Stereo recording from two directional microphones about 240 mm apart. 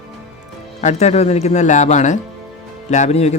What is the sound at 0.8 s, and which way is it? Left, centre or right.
Speech, left.